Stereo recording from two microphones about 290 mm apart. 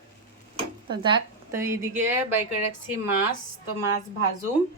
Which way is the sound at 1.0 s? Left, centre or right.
Centre.